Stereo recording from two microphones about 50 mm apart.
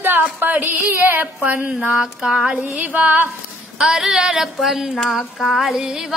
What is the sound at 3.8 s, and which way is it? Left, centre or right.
Music, centre.